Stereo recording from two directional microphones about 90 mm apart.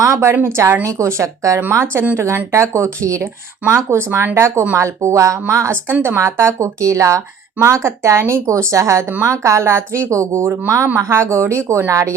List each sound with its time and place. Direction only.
0.0 s a woman's voice: 30° right (ahead or behind)
5.9 s a woman's voice: 25° right (ahead or behind)